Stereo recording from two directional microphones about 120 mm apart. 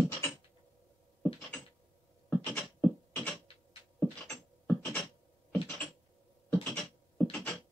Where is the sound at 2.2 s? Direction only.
15° left (ahead or behind).